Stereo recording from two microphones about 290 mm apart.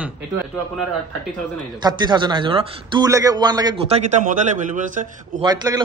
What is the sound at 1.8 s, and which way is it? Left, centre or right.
A man's voice, centre.